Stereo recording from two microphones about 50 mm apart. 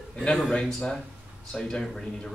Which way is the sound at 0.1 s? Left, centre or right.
Centre.